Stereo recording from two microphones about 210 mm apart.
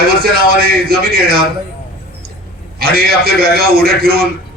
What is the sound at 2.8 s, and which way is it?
A man's voice, 45° right (ahead or behind).